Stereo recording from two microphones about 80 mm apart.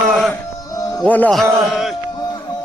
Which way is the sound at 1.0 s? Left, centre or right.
Centre.